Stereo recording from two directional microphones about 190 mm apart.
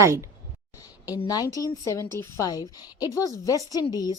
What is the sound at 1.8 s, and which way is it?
A woman's voice, 15° left (ahead or behind).